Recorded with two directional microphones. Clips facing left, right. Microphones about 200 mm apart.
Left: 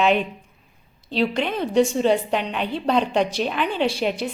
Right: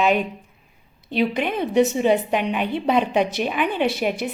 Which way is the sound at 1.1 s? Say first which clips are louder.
Right 1 dB; 15° right (ahead or behind).